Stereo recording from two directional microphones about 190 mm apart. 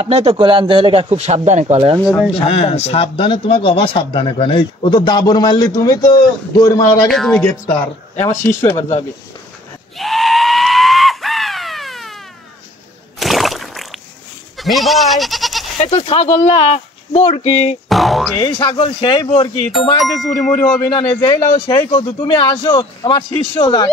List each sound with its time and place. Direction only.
0.0 s speech: 30° right (ahead or behind)
2.3 s a man's voice: 30° left (ahead or behind)
7.1 s speech: centre (ahead or behind)
8.3 s speech: 15° left (ahead or behind)
9.9 s screaming: centre (ahead or behind)
13.2 s a sound: centre (ahead or behind)
14.6 s speech: centre (ahead or behind)
15.8 s speech: 35° left (ahead or behind)
17.8 s speech: centre (ahead or behind)
18.4 s a man's voice: 25° left (ahead or behind)
20.0 s speech: centre (ahead or behind)
20.9 s a man's voice: 25° left (ahead or behind)